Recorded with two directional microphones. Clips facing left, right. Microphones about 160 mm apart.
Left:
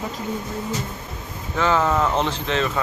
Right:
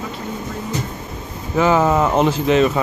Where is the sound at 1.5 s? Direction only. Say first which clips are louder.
Right 5 dB; 15° right (ahead or behind).